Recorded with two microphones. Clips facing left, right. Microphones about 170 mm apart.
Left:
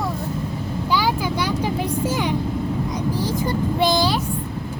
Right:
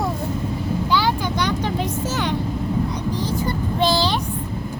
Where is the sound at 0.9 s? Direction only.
10° left (ahead or behind).